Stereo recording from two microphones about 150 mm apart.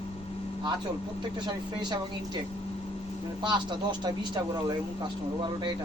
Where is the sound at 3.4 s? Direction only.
30° right (ahead or behind).